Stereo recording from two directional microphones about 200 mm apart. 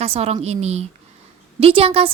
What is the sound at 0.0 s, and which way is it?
A woman's voice, 30° right (ahead or behind).